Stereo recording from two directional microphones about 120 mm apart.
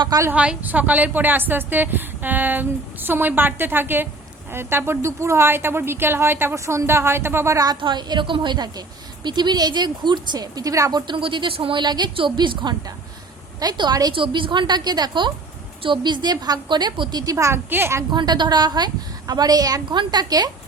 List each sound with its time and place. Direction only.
0.0 s a woman's voice: 30° right (ahead or behind)
0.3 s a woman's voice: 10° right (ahead or behind); by 7.8 s 25° right (ahead or behind)
7.8 s a woman's voice: 40° right (ahead or behind)
11.0 s a woman's voice: 45° right (ahead or behind); by 18.0 s 20° right (ahead or behind)
18.1 s a woman's voice: 40° right (ahead or behind)